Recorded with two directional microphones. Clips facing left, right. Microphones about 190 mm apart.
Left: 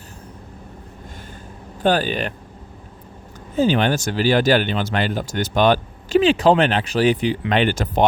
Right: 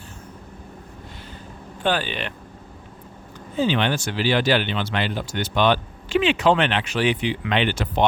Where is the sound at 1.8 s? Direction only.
40° left (ahead or behind).